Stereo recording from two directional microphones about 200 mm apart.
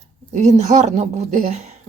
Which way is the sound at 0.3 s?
35° right (ahead or behind).